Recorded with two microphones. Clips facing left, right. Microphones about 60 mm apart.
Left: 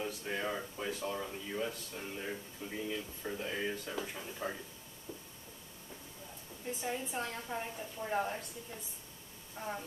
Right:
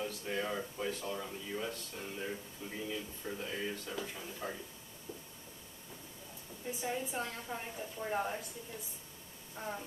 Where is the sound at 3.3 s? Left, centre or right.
Left.